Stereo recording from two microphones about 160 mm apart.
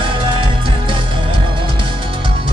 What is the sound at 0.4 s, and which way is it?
Music, 35° right (ahead or behind).